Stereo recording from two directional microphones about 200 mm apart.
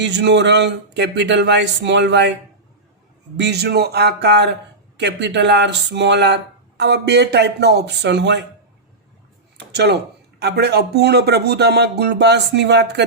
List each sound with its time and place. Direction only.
0.0 s speech: 60° right (ahead or behind)
3.3 s speech: 55° right (ahead or behind)
9.7 s speech: 55° right (ahead or behind)